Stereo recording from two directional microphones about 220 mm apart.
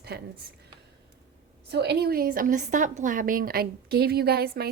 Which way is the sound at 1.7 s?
50° right (ahead or behind).